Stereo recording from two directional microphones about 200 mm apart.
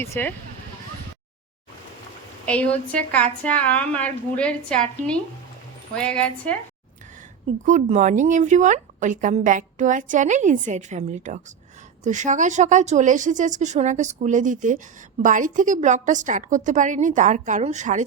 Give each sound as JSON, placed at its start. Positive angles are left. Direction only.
{"t": 0.1, "sound": "a woman's voice", "side_deg": 10}
{"t": 2.5, "sound": "a woman's voice", "side_deg": 5}
{"t": 7.6, "sound": "a woman's voice", "side_deg": -35}